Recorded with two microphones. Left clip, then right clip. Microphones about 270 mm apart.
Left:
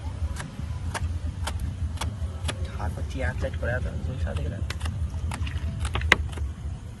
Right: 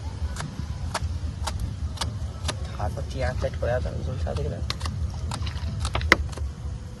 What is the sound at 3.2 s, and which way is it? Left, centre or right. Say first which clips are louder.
Speech: right 4 dB; right.